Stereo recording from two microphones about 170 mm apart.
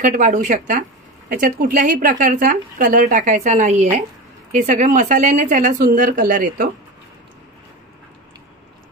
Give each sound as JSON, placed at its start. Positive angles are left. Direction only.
{"t": 0.0, "sound": "speech", "side_deg": -45}